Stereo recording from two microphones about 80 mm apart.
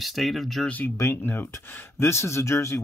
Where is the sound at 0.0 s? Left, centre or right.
Centre.